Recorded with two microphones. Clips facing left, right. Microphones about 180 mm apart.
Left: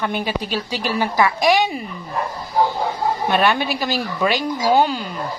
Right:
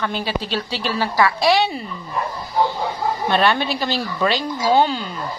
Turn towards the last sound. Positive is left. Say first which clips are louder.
# even
turn(degrees=5)  # may be behind; listen again after turning